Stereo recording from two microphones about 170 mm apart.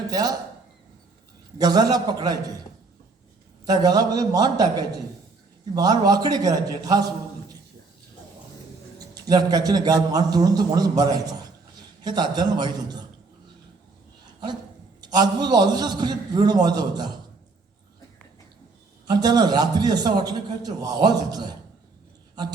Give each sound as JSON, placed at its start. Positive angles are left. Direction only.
{"t": 0.1, "sound": "speech", "side_deg": -20}
{"t": 1.5, "sound": "a man's voice", "side_deg": -20}
{"t": 3.7, "sound": "a man's voice", "side_deg": -20}
{"t": 9.2, "sound": "a man's voice", "side_deg": -20}
{"t": 15.1, "sound": "a man's voice", "side_deg": -25}
{"t": 19.0, "sound": "a man's voice", "side_deg": -25}